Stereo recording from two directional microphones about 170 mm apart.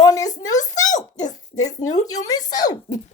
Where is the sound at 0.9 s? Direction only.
45° left (ahead or behind).